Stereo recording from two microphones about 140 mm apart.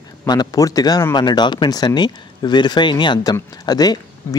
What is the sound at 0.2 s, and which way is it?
Speech, 30° left (ahead or behind).